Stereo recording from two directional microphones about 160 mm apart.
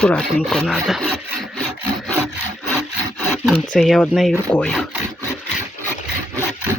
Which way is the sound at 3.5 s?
55° left (ahead or behind).